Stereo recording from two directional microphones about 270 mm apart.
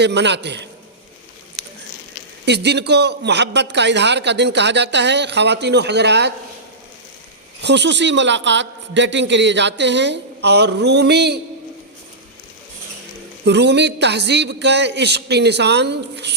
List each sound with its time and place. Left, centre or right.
0.0 s a woman's voice: right
2.4 s a woman's voice: right
7.6 s a woman's voice: right
13.4 s a woman's voice: right